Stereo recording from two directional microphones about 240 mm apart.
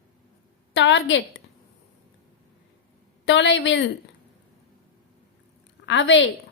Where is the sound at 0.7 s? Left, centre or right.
Left.